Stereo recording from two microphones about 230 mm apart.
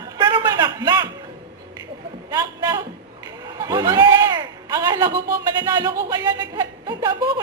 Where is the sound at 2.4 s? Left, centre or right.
Centre.